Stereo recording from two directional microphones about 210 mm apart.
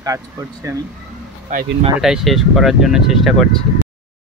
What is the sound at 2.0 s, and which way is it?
Speech, centre (ahead or behind).